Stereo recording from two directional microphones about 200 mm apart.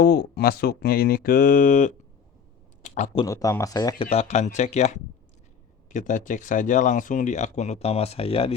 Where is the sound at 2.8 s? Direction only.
35° left (ahead or behind).